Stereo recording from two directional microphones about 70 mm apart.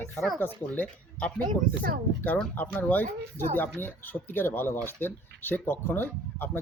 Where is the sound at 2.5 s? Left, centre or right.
Left.